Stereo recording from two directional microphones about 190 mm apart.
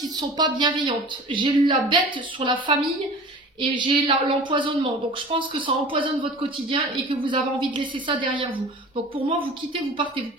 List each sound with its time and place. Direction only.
0.0 s speech: 20° right (ahead or behind)